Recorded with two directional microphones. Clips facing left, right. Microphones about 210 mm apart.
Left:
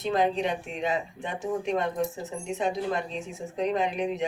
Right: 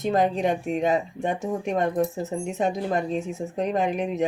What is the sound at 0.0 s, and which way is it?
Speech, 45° right (ahead or behind).